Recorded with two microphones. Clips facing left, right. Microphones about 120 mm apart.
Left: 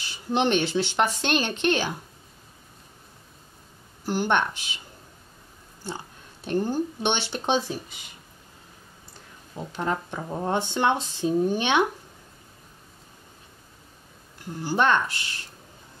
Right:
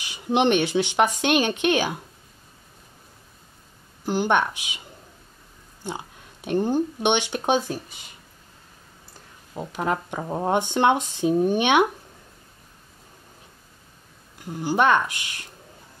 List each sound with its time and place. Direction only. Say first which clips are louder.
0.0 s speech: right 3 dB; 15° right (ahead or behind)
4.0 s speech: right 2 dB; 15° right (ahead or behind)
5.9 s speech: right 3 dB; 15° right (ahead or behind)
9.5 s speech: right 2 dB; 10° right (ahead or behind)
10.2 s speech: right 4 dB; 20° right (ahead or behind)
14.5 s speech: right 3 dB; 10° right (ahead or behind)